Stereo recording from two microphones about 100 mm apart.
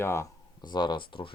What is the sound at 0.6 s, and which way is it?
Speech, 45° left (ahead or behind).